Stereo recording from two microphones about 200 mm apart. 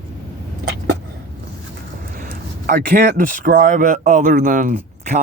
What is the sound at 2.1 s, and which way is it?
Speech, 40° right (ahead or behind).